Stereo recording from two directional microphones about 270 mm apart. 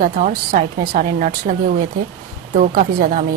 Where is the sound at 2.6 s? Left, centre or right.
Right.